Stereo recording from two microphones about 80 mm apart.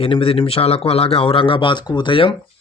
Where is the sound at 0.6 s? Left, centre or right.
Left.